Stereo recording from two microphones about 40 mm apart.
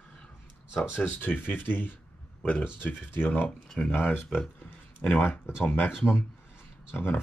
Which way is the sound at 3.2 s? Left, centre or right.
Left.